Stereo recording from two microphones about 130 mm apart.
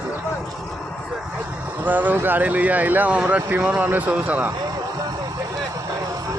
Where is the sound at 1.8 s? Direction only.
15° right (ahead or behind).